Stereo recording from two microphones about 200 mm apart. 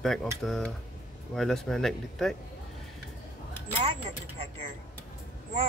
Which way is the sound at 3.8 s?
30° right (ahead or behind).